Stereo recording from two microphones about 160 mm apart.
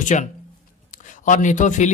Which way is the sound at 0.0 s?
50° left (ahead or behind).